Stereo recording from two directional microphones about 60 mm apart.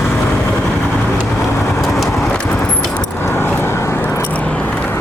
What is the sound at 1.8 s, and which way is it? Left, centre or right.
Vehicle, centre.